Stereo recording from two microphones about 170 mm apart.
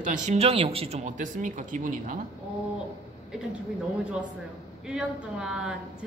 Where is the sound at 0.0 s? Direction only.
45° right (ahead or behind).